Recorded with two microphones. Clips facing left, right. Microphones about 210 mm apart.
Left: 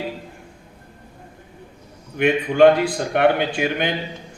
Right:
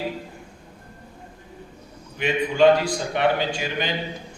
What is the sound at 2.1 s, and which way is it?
A man's voice, 55° left (ahead or behind).